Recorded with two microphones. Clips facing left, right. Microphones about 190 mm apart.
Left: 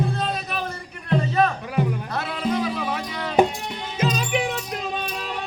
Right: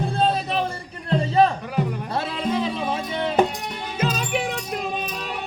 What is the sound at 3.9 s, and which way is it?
Music, 5° right (ahead or behind).